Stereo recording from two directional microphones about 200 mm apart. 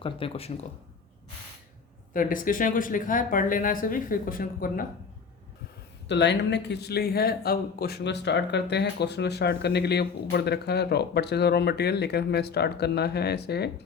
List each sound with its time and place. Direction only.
0.0 s speech: 30° left (ahead or behind)
2.1 s speech: 45° left (ahead or behind)
6.1 s speech: 60° left (ahead or behind)